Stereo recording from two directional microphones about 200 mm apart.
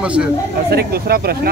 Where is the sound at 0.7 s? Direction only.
50° right (ahead or behind).